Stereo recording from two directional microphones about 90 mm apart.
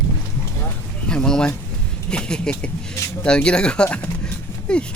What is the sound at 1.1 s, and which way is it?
Speech, 10° left (ahead or behind).